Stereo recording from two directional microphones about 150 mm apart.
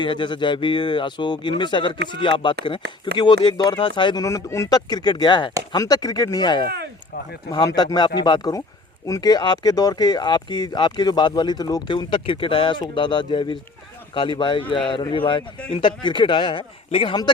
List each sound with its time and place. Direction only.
0.0 s speech: 30° left (ahead or behind)